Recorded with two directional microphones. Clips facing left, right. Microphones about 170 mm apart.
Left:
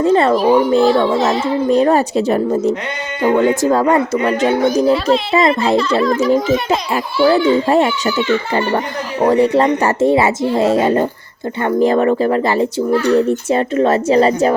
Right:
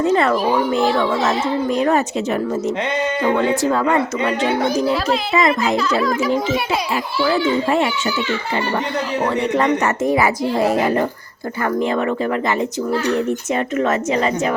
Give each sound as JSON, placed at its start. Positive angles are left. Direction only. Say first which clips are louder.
{"t": 0.0, "sound": "a child's voice", "louder": "left 4 dB", "side_deg": 30}
{"t": 6.0, "sound": "a child's voice", "louder": "left 4 dB", "side_deg": 0}
{"t": 6.3, "sound": "a child's voice", "louder": "left 5 dB", "side_deg": 45}
{"t": 9.2, "sound": "a woman's voice", "louder": "left 8 dB", "side_deg": 40}
{"t": 11.6, "sound": "a child's voice", "louder": "left 6 dB", "side_deg": 35}